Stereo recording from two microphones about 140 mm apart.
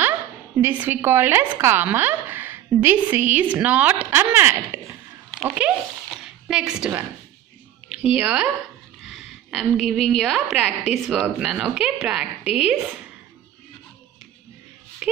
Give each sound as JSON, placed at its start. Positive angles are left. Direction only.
{"t": 0.6, "sound": "a woman's voice", "side_deg": -15}
{"t": 6.2, "sound": "a sound", "side_deg": -5}
{"t": 7.9, "sound": "a woman's voice", "side_deg": -10}